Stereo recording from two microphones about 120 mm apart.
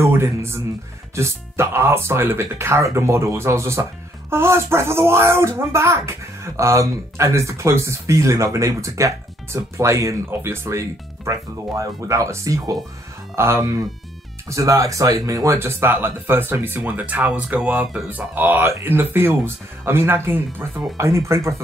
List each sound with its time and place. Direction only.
0.0 s speech: 20° right (ahead or behind)